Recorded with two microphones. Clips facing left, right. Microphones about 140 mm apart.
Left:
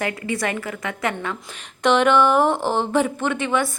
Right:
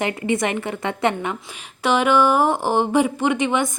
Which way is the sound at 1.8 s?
5° right (ahead or behind).